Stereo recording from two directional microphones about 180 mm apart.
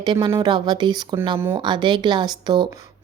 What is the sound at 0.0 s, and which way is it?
A woman's voice, 25° right (ahead or behind).